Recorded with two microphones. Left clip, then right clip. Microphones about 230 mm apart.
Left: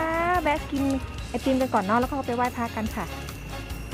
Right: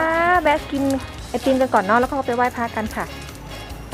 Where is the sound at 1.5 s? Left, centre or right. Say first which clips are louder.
Right 7 dB; right.